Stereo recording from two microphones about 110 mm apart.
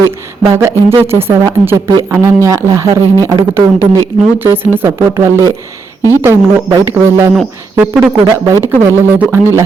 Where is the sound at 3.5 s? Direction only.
20° right (ahead or behind).